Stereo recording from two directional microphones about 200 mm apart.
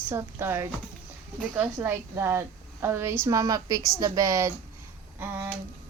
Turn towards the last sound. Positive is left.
turn(degrees=-10)  # may be behind; listen again after turning